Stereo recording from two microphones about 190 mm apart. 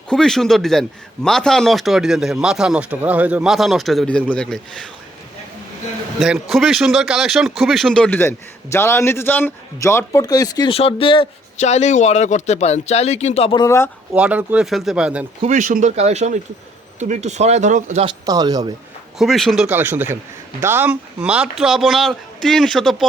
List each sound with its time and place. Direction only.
0.1 s a man's voice: centre (ahead or behind)
6.1 s speech: 5° right (ahead or behind); by 13.7 s 30° left (ahead or behind)
13.7 s speech: 15° left (ahead or behind)
14.1 s a man's voice: 5° right (ahead or behind)
15.4 s speech: 40° right (ahead or behind)
18.0 s speech: 20° right (ahead or behind)
19.2 s a man's voice: centre (ahead or behind)